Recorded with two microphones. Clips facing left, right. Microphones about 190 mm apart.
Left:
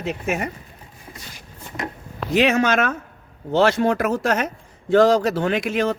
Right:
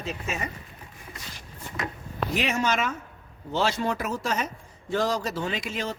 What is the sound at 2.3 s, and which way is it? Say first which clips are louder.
A man's voice: left 9 dB; 75° left (ahead or behind).